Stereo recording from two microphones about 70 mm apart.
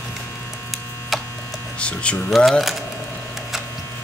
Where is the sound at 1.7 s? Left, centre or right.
Centre.